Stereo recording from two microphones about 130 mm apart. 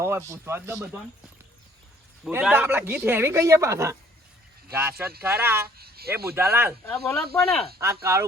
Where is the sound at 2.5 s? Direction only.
15° right (ahead or behind).